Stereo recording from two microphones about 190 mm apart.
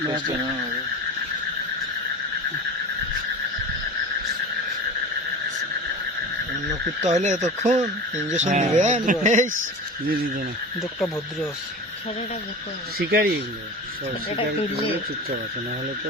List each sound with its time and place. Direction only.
7.0 s speech: 40° right (ahead or behind)
13.0 s speech: 55° right (ahead or behind)